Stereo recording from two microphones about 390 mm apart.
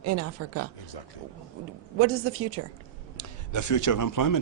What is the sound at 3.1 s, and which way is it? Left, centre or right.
A man's voice, left.